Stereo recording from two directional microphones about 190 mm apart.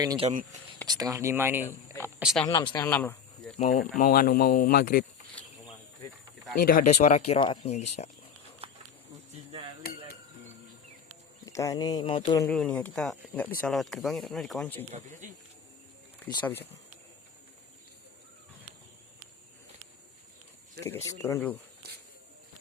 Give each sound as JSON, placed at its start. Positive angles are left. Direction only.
{"t": 0.0, "sound": "speech", "side_deg": -20}
{"t": 2.7, "sound": "speech", "side_deg": 10}
{"t": 3.6, "sound": "speech", "side_deg": 40}
{"t": 6.6, "sound": "speech", "side_deg": 45}
{"t": 7.3, "sound": "speech", "side_deg": 30}
{"t": 8.6, "sound": "a sound", "side_deg": -30}
{"t": 9.5, "sound": "hammer", "side_deg": -30}
{"t": 11.4, "sound": "speech", "side_deg": 15}
{"t": 12.5, "sound": "speech", "side_deg": 5}
{"t": 14.8, "sound": "speech", "side_deg": -40}
{"t": 16.4, "sound": "speech", "side_deg": 10}
{"t": 20.8, "sound": "speech", "side_deg": 15}